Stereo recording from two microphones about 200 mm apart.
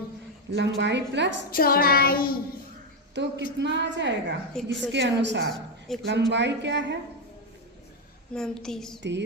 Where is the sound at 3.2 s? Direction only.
60° right (ahead or behind).